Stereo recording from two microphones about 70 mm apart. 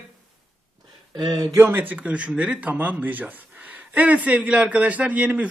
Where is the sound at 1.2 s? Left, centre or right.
Right.